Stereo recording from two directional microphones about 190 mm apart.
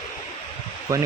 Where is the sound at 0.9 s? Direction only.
15° right (ahead or behind).